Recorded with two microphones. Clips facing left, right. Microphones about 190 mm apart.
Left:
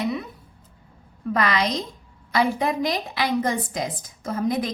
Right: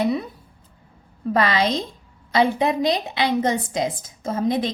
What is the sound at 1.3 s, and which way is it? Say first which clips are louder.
A woman's voice: right 3 dB; 30° right (ahead or behind).